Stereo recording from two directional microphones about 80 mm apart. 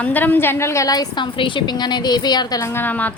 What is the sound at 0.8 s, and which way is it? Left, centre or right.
Speech, left.